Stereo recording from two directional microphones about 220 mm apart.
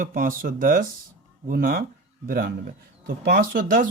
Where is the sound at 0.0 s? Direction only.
40° right (ahead or behind).